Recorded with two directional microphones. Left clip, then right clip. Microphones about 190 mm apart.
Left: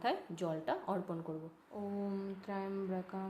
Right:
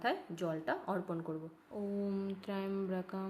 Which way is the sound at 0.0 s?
5° right (ahead or behind).